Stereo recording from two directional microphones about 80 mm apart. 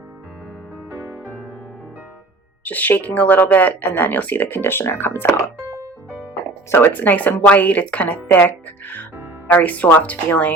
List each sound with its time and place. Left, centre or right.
2.6 s speech: left
5.5 s music: right
6.7 s speech: left